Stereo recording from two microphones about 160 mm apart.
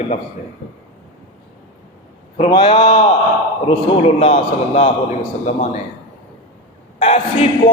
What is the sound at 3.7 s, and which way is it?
A man's voice, 35° left (ahead or behind).